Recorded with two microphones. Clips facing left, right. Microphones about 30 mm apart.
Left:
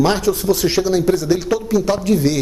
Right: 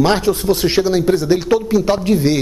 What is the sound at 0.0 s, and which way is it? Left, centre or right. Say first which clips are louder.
A man's voice: right 2 dB; right.